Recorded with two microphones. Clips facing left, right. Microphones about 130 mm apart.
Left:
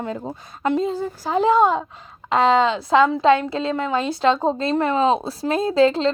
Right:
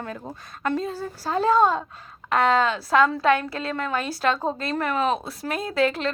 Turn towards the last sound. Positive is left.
turn(degrees=25)  # may be behind; listen again after turning